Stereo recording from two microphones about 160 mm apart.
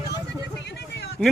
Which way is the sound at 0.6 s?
90° left.